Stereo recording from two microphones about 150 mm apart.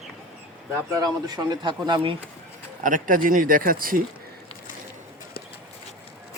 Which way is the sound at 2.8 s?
65° right (ahead or behind).